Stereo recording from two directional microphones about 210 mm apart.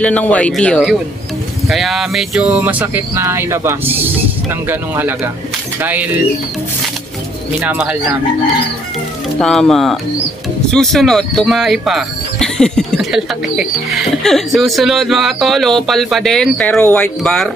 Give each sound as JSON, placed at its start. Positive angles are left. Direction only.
{"t": 0.0, "sound": "speech", "side_deg": 5}
{"t": 7.6, "sound": "speech", "side_deg": -5}
{"t": 9.4, "sound": "speech", "side_deg": 0}